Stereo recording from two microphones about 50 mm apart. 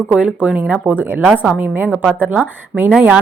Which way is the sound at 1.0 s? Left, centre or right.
Right.